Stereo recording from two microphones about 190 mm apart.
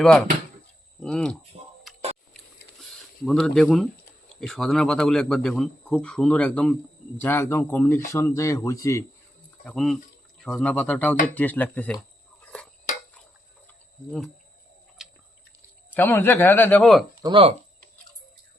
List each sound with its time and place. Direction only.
0.0 s a man's voice: 5° left (ahead or behind)
2.8 s a man's voice: 5° left (ahead or behind)
9.6 s a man's voice: centre (ahead or behind)
12.4 s a sound: 5° left (ahead or behind)
15.0 s drip: centre (ahead or behind)
16.0 s speech: 10° left (ahead or behind)
17.2 s speech: 30° right (ahead or behind)